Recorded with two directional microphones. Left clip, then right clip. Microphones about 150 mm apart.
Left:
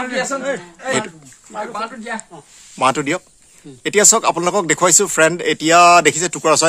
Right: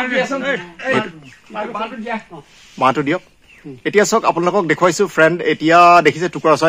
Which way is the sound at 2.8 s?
45° left (ahead or behind).